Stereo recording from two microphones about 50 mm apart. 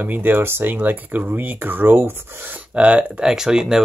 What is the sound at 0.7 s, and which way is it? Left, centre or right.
Speech, right.